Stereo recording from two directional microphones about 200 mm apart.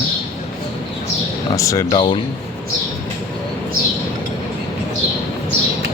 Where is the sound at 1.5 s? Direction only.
15° left (ahead or behind).